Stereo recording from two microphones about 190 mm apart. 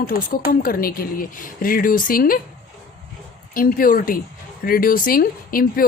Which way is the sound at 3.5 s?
50° left (ahead or behind).